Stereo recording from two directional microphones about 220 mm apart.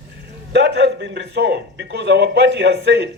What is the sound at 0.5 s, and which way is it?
A man's voice, 50° right (ahead or behind).